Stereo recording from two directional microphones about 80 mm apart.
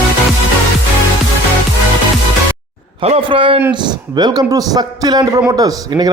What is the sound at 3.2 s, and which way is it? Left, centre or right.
Speech, right.